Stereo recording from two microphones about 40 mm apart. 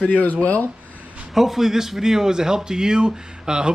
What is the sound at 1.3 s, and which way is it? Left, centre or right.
Speech, centre.